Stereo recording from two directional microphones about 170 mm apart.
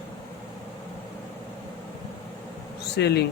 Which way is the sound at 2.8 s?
75° left (ahead or behind).